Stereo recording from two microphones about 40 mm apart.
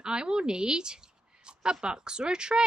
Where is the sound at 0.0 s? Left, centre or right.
Right.